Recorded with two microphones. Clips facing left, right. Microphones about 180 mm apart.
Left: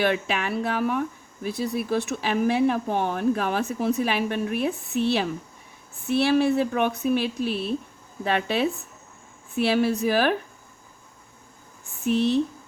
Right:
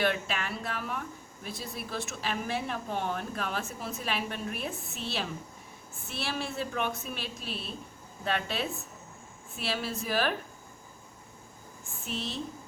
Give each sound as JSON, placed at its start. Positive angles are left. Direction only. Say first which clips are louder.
{"t": 0.0, "sound": "speech", "louder": "left 6 dB", "side_deg": 60}
{"t": 12.0, "sound": "speech", "louder": "left 15 dB", "side_deg": 60}